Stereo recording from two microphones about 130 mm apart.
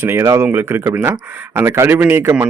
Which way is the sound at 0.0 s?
20° right (ahead or behind).